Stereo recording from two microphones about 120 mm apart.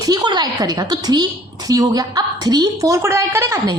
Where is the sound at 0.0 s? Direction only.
35° right (ahead or behind).